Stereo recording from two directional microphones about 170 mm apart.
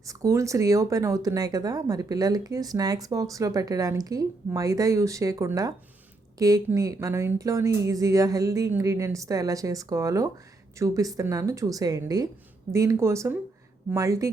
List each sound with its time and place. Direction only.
0.0 s a woman's voice: 20° right (ahead or behind)